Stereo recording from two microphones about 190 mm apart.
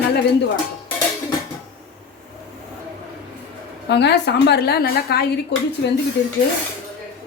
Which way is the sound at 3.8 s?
65° left (ahead or behind).